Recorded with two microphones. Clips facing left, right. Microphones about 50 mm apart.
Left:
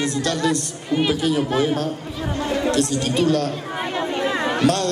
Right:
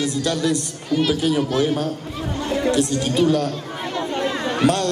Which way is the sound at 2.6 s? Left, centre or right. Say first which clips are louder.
Right 2 dB; centre.